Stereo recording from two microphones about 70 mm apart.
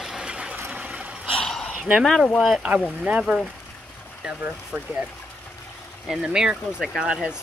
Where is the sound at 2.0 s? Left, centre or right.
Centre.